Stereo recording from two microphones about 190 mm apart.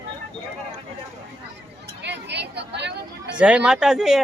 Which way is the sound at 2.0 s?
65° right (ahead or behind).